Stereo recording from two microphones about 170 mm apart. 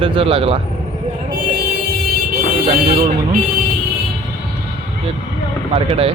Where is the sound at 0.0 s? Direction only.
35° right (ahead or behind).